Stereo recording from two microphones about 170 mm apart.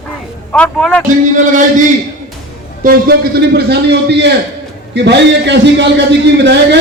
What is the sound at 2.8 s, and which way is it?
A man's voice, 60° right (ahead or behind).